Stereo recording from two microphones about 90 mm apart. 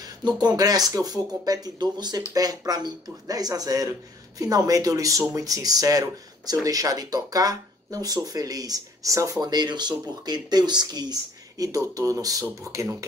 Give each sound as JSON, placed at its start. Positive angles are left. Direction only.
{"t": 0.0, "sound": "speech", "side_deg": -50}